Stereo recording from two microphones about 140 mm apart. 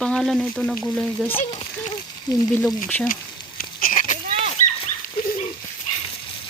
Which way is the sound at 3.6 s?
90° left.